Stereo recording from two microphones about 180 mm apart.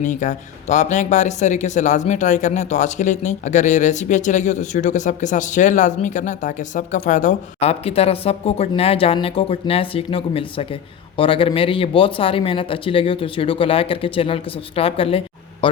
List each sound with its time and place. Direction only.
0.0 s speech: 45° left (ahead or behind); by 15.8 s 30° left (ahead or behind)